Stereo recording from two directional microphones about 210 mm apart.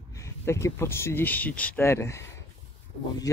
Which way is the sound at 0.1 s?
15° left (ahead or behind).